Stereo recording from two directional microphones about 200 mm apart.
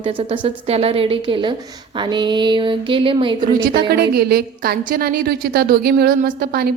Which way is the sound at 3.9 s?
50° right (ahead or behind).